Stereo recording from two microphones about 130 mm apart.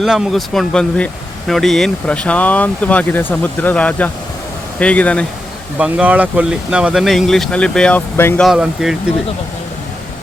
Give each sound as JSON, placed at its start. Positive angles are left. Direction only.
{"t": 0.0, "sound": "speech", "side_deg": 0}
{"t": 5.8, "sound": "speech", "side_deg": -10}
{"t": 8.1, "sound": "speech", "side_deg": 20}
{"t": 8.4, "sound": "speech", "side_deg": 0}